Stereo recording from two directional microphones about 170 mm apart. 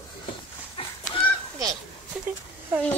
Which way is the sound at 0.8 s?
30° left (ahead or behind).